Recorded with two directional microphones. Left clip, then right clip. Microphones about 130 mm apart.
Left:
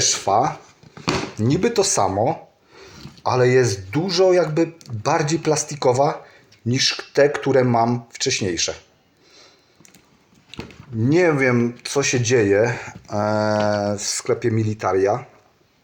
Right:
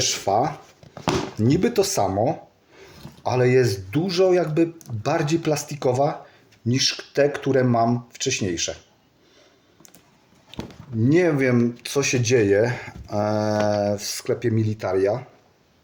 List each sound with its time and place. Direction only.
0.0 s speech: 20° right (ahead or behind)
11.0 s speech: 10° right (ahead or behind)